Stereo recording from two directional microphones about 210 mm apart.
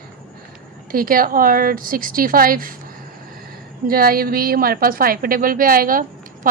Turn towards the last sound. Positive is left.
turn(degrees=-40)  # may be behind; listen again after turning